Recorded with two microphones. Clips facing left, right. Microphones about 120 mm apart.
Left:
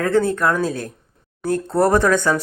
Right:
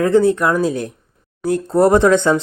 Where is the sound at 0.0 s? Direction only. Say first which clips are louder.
Right 4 dB; 15° right (ahead or behind).